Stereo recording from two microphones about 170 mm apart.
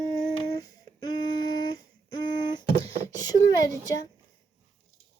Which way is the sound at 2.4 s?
25° left (ahead or behind).